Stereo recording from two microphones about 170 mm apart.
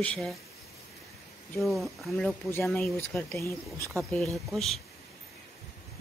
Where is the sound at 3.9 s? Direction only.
Centre (ahead or behind).